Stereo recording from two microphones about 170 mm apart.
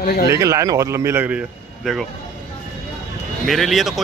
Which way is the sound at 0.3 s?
20° right (ahead or behind).